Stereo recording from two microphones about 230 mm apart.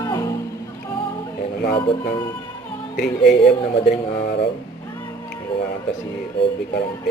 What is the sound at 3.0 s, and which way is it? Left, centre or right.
Speech, left.